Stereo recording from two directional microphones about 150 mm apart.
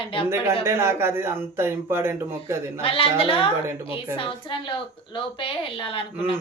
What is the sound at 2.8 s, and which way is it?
A woman's voice, 40° left (ahead or behind).